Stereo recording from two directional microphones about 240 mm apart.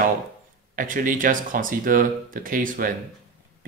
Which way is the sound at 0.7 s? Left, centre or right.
Right.